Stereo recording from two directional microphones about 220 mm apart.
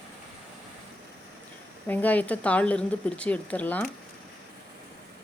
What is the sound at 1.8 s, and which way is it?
Speech, 10° left (ahead or behind).